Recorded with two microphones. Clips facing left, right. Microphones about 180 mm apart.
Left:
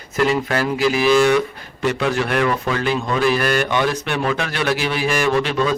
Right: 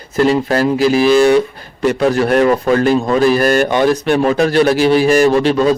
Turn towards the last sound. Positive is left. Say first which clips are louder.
# right 7 dB
turn(degrees=-35)  # may be behind; listen again after turning